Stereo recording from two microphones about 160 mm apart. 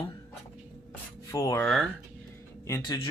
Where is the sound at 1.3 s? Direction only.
20° left (ahead or behind).